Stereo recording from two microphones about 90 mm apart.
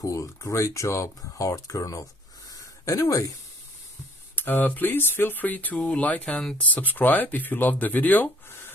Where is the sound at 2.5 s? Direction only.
45° left (ahead or behind).